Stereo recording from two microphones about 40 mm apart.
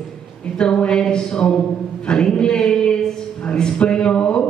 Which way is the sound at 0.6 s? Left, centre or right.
Left.